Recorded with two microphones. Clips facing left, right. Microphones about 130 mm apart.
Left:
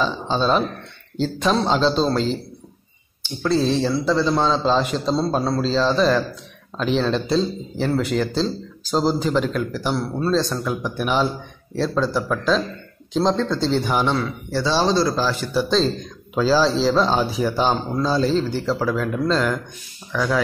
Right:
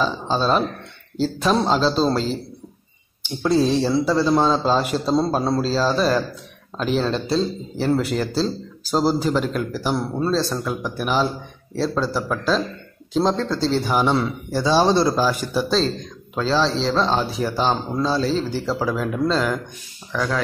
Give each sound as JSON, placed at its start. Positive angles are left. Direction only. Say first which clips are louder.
{"t": 0.0, "sound": "speech", "louder": "even", "side_deg": -5}
{"t": 3.2, "sound": "a man's voice", "louder": "right 2 dB", "side_deg": -15}
{"t": 9.9, "sound": "speech", "louder": "even", "side_deg": -20}
{"t": 10.3, "sound": "speech", "louder": "left 1 dB", "side_deg": 0}
{"t": 14.1, "sound": "a man's voice", "louder": "right 1 dB", "side_deg": -20}
{"t": 16.3, "sound": "a man's voice", "louder": "left 3 dB", "side_deg": 5}